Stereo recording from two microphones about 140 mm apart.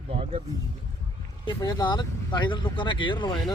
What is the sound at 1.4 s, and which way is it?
Speech, 30° left (ahead or behind).